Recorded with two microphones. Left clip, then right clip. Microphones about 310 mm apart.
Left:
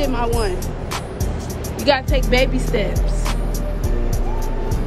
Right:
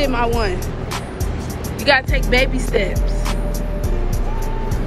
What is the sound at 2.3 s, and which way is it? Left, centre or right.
Speech, centre.